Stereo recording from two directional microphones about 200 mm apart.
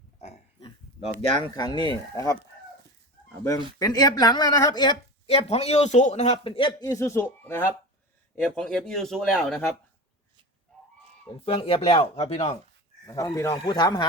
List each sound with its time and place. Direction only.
0.2 s a sound: 35° left (ahead or behind)
1.5 s speech: 20° left (ahead or behind)
3.8 s speech: 20° left (ahead or behind); by 9.6 s centre (ahead or behind)
11.4 s speech: 25° left (ahead or behind)
13.1 s speech: 20° left (ahead or behind)